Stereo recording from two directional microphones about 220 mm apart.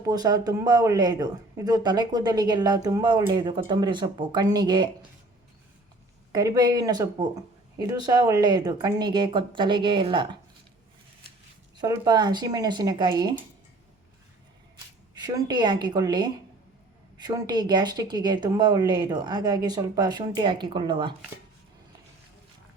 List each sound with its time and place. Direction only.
0.0 s speech: 15° right (ahead or behind)
6.3 s speech: 15° right (ahead or behind)
11.8 s speech: 20° right (ahead or behind)
15.1 s speech: 15° right (ahead or behind)